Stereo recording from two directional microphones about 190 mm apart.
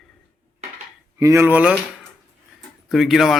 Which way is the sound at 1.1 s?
15° right (ahead or behind).